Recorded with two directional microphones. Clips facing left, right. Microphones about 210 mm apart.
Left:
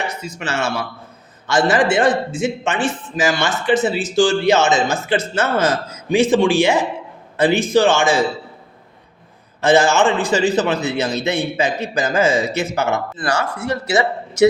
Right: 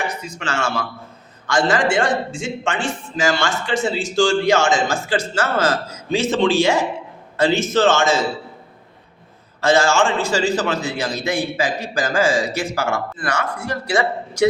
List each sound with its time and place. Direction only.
0.3 s a man's voice: 20° left (ahead or behind)
9.6 s a man's voice: 20° left (ahead or behind)